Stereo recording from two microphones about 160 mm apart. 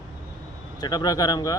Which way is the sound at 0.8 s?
25° left (ahead or behind).